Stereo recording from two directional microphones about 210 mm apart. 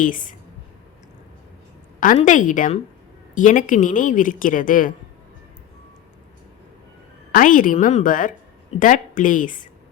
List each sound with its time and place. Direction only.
0.0 s speech: 40° left (ahead or behind)
2.0 s speech: 40° left (ahead or behind)
7.3 s speech: 40° left (ahead or behind)